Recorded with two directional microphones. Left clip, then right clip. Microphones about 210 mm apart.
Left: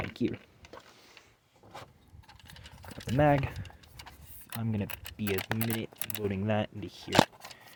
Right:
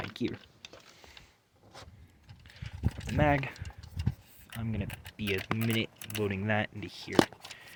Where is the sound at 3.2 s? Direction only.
20° left (ahead or behind).